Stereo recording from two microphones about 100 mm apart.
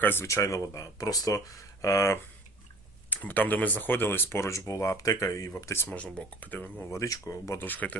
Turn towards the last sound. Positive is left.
turn(degrees=15)  # may be behind; listen again after turning